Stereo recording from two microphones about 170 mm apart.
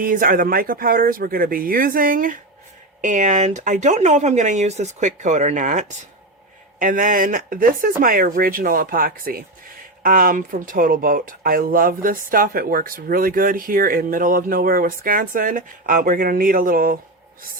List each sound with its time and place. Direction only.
0.0 s speech: 55° right (ahead or behind)